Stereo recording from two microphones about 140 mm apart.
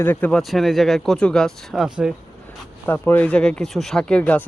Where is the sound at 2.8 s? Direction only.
15° left (ahead or behind).